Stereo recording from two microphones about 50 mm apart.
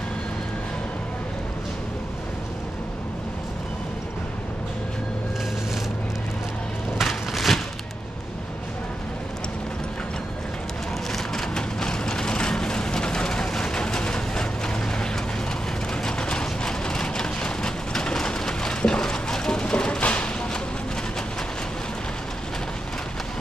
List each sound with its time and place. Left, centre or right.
7.0 s a sound: centre
11.1 s vehicle: centre
15.9 s vehicle: centre
19.6 s music: centre